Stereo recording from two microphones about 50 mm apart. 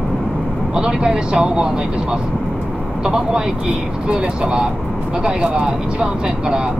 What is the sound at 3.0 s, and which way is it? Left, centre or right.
Speech, centre.